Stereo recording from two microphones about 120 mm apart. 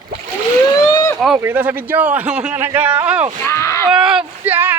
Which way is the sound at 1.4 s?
20° right (ahead or behind).